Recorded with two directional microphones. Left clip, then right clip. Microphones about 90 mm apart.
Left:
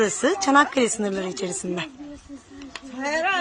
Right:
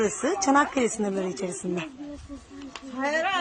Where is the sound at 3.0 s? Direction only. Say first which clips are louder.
Left 2 dB; 40° left (ahead or behind).